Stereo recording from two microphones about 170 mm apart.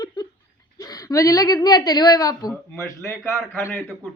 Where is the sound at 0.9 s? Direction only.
20° left (ahead or behind).